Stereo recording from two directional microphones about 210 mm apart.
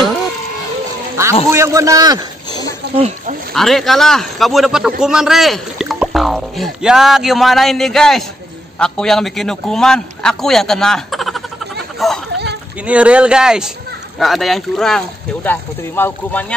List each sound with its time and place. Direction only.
1.2 s a sound: 15° right (ahead or behind)
1.5 s a man's voice: 15° right (ahead or behind)
2.8 s speech: 55° right (ahead or behind)
3.5 s speech: centre (ahead or behind)
12.0 s a sound: centre (ahead or behind)
12.8 s speech: 5° right (ahead or behind)